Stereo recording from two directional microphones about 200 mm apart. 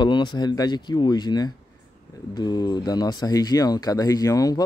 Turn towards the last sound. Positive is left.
turn(degrees=15)  # may be behind; listen again after turning